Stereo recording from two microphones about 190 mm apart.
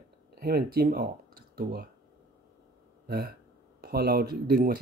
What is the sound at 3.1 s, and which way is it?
Speech, 55° right (ahead or behind).